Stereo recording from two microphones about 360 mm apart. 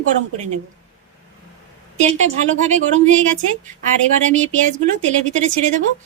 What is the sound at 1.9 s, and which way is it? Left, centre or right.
Speech, centre.